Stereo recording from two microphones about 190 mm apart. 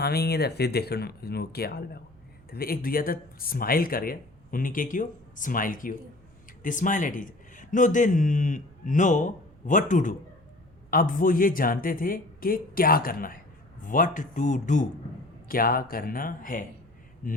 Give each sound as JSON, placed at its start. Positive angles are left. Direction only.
{"t": 0.0, "sound": "speech", "side_deg": 55}